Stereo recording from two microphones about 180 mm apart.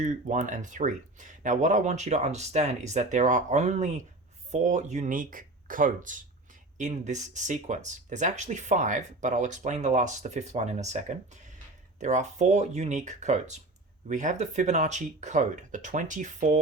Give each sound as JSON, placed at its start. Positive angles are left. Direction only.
{"t": 0.0, "sound": "speech", "side_deg": -45}